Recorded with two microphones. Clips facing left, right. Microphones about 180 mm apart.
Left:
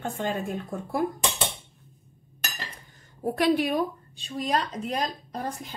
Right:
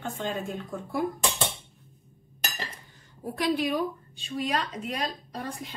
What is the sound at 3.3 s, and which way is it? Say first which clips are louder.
Speech: left 3 dB; 60° left (ahead or behind).